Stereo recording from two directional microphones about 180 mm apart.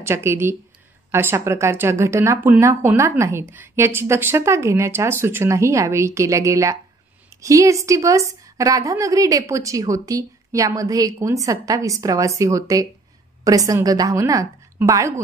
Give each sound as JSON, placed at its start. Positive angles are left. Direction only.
{"t": 0.0, "sound": "speech", "side_deg": -15}